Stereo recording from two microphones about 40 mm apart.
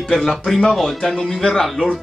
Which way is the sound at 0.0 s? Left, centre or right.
Centre.